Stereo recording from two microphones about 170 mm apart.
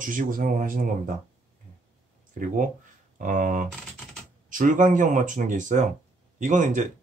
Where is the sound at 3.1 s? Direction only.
50° right (ahead or behind).